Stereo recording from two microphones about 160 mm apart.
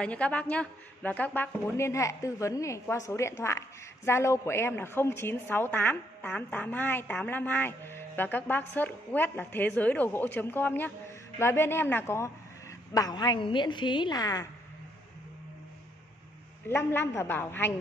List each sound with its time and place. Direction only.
0.0 s a woman's voice: 10° left (ahead or behind)
16.6 s a woman's voice: 15° left (ahead or behind)